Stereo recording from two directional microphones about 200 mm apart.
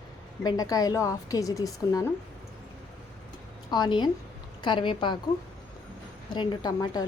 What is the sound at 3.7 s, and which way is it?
A woman's voice, 20° left (ahead or behind).